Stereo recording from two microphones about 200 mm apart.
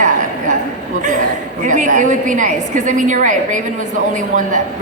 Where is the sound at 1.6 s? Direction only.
40° right (ahead or behind).